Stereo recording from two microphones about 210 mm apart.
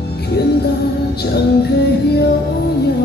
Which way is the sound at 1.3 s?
50° left (ahead or behind).